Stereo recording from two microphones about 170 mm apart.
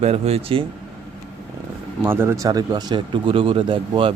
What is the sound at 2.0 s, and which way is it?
Speech, 15° right (ahead or behind).